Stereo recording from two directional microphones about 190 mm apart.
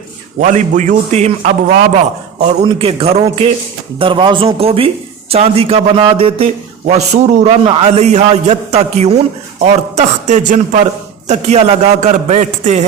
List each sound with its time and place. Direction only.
0.4 s a man's voice: 40° right (ahead or behind)